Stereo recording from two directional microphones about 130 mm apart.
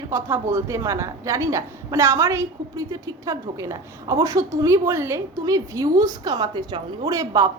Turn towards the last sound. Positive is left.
turn(degrees=-25)  # may be behind; listen again after turning